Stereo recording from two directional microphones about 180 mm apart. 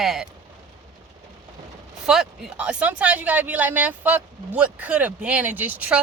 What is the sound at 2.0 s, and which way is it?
Speech, centre (ahead or behind).